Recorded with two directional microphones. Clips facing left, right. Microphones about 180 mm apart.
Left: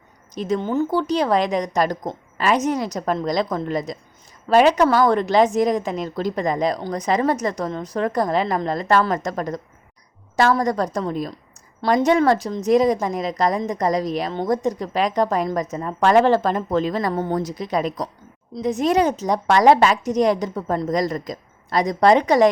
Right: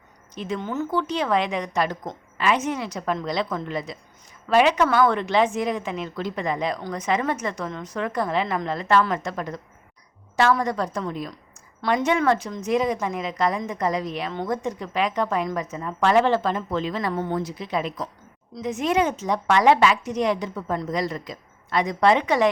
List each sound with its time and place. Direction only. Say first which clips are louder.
0.3 s a woman's voice: left 6 dB; 40° left (ahead or behind)